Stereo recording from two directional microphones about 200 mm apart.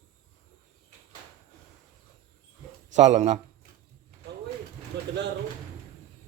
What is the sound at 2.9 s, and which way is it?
Speech, 35° right (ahead or behind).